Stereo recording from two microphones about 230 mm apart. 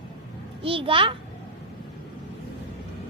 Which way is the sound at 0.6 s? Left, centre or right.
Right.